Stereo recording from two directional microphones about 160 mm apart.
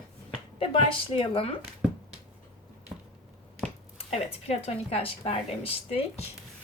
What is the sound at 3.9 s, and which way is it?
Speech, 40° left (ahead or behind).